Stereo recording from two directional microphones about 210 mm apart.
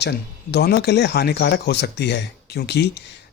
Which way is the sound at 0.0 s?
50° left (ahead or behind).